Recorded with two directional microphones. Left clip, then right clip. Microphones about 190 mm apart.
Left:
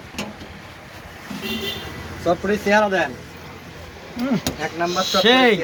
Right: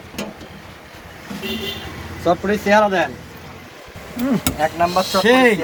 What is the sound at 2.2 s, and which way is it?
Speech, 45° right (ahead or behind).